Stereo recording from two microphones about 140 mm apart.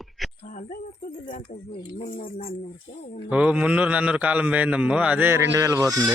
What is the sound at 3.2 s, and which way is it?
A man's voice, 10° right (ahead or behind).